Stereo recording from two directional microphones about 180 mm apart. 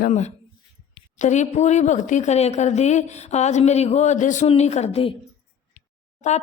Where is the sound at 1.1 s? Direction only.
40° left (ahead or behind).